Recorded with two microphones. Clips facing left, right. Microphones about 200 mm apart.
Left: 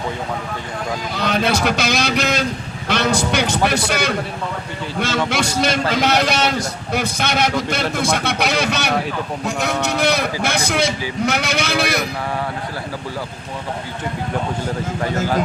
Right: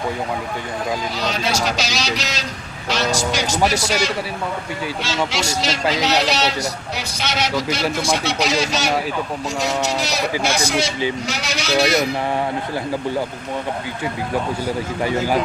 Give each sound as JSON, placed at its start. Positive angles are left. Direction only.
{"t": 1.1, "sound": "a man's voice", "side_deg": 55}
{"t": 15.0, "sound": "speech", "side_deg": -10}